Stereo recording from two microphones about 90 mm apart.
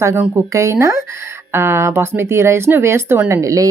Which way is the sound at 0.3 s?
30° right (ahead or behind).